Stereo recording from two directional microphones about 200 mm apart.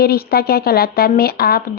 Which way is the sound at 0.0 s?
50° left (ahead or behind).